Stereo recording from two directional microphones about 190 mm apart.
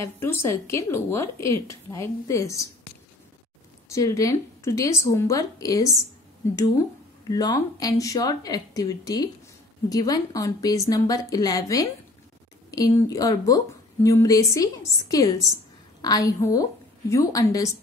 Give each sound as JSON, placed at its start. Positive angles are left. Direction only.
{"t": 0.0, "sound": "a woman's voice", "side_deg": 15}
{"t": 3.9, "sound": "a woman's voice", "side_deg": 15}
{"t": 7.2, "sound": "a woman's voice", "side_deg": 20}